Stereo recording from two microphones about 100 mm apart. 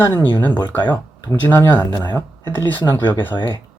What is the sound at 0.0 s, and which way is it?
Speech, 20° left (ahead or behind).